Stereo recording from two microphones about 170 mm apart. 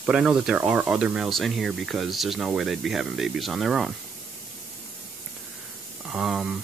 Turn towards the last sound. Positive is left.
turn(degrees=-5)  # may be behind; listen again after turning